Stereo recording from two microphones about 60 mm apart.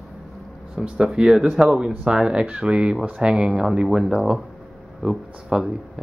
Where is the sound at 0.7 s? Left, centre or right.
Centre.